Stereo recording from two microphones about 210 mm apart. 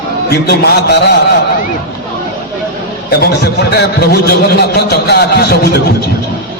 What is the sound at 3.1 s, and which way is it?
A man's voice, 50° left (ahead or behind).